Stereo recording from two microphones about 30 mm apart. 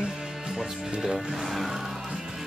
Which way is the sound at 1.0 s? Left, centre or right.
Centre.